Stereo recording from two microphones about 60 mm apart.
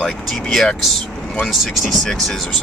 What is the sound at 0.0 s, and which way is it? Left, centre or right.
Speech, centre.